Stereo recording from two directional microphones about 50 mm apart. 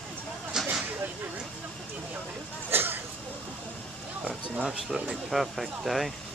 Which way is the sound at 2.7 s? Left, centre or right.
Right.